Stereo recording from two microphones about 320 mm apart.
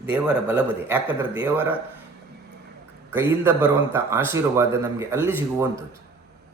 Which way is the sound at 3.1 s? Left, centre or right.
Centre.